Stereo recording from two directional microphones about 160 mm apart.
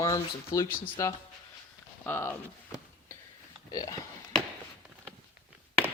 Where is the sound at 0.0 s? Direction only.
20° left (ahead or behind).